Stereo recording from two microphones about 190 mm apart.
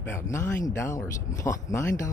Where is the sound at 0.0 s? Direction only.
15° left (ahead or behind).